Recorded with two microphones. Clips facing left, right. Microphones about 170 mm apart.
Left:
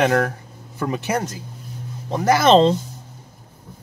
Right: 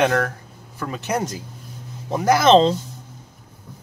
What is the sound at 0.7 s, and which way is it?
Speech, 20° left (ahead or behind).